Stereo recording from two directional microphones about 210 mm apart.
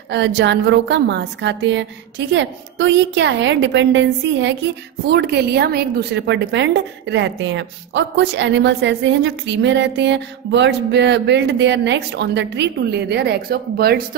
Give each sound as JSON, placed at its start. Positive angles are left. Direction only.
{"t": 0.1, "sound": "a woman's voice", "side_deg": -55}